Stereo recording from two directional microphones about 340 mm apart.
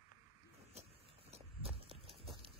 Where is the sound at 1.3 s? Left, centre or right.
Centre.